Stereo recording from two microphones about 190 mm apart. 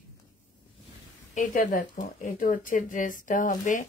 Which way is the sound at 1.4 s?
45° left (ahead or behind).